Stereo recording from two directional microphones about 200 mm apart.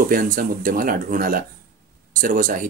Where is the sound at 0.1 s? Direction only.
45° right (ahead or behind).